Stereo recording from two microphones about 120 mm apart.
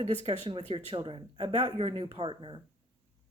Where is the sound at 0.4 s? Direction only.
50° right (ahead or behind).